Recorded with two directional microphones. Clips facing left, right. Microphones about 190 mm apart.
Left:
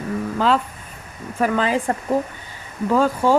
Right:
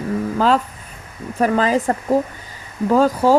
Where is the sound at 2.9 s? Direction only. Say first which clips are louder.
Right 3 dB; 40° right (ahead or behind).